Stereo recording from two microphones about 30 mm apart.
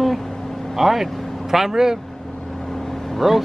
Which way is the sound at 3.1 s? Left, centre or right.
Centre.